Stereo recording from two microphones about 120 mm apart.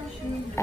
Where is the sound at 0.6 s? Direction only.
25° left (ahead or behind).